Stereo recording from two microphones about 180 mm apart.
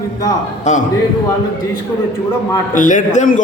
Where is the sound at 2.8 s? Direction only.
45° left (ahead or behind).